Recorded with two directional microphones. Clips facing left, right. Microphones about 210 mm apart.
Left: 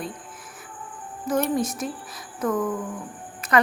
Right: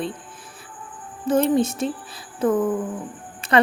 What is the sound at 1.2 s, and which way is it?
Speech, 25° right (ahead or behind).